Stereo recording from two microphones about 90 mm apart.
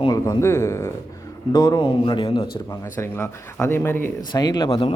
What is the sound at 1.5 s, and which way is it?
Speech, 50° left (ahead or behind).